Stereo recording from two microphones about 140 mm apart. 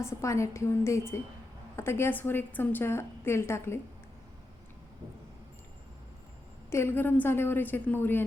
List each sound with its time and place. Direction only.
0.0 s a woman's voice: 20° left (ahead or behind)
6.7 s a woman's voice: 20° left (ahead or behind)